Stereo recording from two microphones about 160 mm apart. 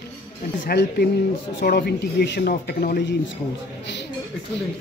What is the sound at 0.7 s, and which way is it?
Speech, 70° left (ahead or behind).